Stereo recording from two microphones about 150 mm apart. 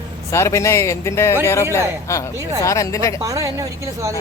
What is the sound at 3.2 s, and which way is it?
Speech, 20° right (ahead or behind).